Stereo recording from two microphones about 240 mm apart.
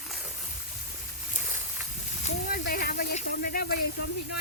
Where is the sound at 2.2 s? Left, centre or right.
Left.